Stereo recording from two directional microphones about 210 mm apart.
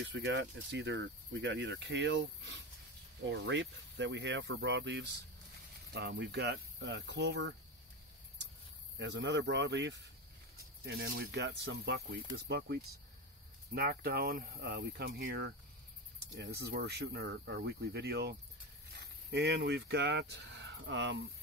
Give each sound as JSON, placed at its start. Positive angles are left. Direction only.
{"t": 0.0, "sound": "speech", "side_deg": -55}
{"t": 8.9, "sound": "speech", "side_deg": -55}